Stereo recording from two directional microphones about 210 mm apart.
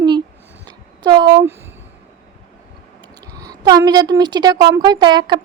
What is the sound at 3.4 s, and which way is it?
A woman's voice, 15° right (ahead or behind).